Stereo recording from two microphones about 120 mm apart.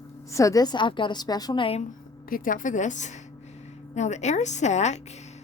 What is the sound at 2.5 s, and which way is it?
Speech, 90° left.